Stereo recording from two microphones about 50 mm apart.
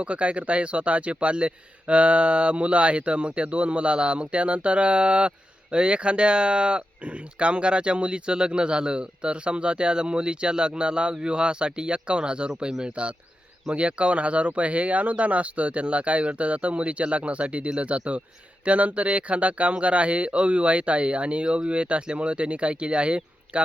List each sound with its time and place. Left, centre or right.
0.0 s speech: right